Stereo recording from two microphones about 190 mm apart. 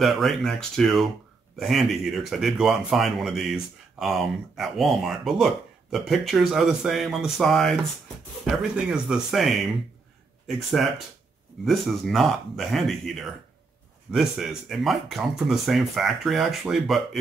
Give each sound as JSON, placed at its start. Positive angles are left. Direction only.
{"t": 0.0, "sound": "speech", "side_deg": 0}